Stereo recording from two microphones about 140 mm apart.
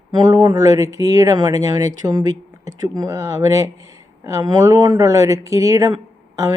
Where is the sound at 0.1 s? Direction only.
30° right (ahead or behind).